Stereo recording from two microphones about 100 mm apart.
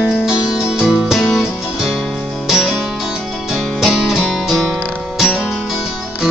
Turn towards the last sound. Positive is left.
turn(degrees=-5)  # may be behind; listen again after turning